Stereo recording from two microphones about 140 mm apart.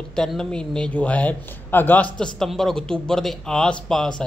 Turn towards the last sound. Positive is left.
turn(degrees=5)  # may be behind; listen again after turning